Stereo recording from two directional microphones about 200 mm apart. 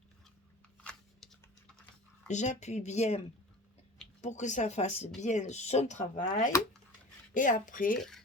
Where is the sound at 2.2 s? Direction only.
35° left (ahead or behind).